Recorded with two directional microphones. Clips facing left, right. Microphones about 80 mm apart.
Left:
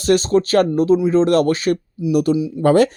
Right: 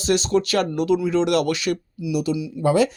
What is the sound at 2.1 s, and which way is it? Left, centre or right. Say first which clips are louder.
Speech: left 7 dB; left.